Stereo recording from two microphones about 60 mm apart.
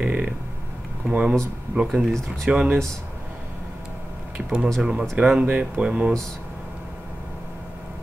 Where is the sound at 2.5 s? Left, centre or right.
Centre.